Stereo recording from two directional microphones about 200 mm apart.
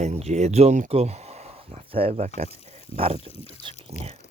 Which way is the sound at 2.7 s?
30° right (ahead or behind).